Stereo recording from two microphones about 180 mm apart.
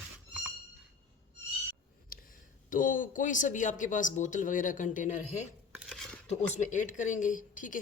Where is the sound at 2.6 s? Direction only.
45° left (ahead or behind).